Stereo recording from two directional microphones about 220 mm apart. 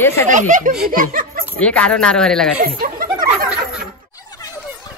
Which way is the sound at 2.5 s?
40° right (ahead or behind).